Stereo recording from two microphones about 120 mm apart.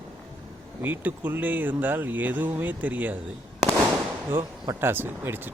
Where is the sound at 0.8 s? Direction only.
15° right (ahead or behind).